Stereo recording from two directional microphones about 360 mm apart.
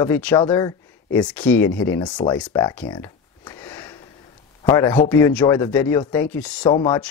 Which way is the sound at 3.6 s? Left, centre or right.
Centre.